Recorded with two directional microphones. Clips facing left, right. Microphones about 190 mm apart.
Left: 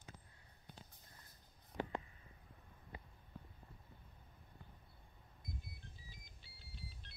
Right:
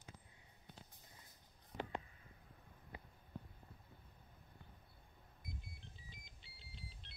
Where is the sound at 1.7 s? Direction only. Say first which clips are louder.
Left 3 dB; centre (ahead or behind).